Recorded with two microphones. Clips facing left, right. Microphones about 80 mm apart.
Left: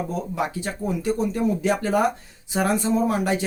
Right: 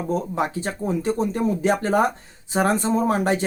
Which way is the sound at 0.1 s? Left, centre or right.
Right.